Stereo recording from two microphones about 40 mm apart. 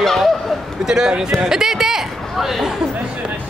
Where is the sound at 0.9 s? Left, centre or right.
Centre.